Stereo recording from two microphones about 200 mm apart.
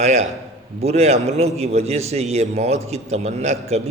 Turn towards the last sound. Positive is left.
turn(degrees=-35)  # may be behind; listen again after turning